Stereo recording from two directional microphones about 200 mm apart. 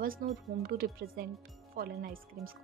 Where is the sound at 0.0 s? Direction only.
50° right (ahead or behind).